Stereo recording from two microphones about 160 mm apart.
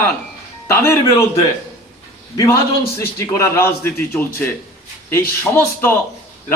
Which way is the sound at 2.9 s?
20° left (ahead or behind).